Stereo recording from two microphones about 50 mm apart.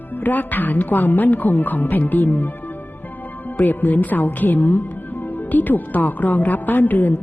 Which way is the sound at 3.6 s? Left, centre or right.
Left.